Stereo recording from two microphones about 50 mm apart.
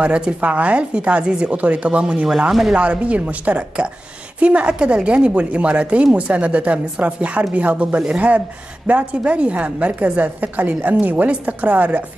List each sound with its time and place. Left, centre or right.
0.0 s speech: right
2.2 s speech: centre
2.7 s a woman's voice: right